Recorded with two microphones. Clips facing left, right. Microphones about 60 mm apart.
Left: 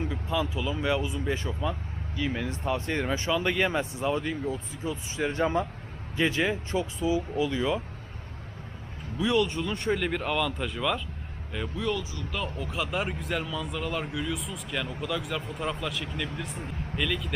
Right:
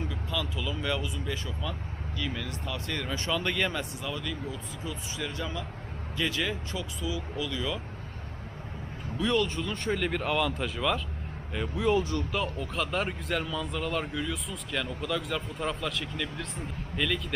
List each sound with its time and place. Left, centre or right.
0.0 s speech: left
3.2 s speech: centre
9.1 s speech: centre